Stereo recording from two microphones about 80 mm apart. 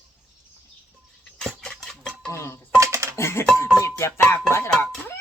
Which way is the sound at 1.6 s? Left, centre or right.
Centre.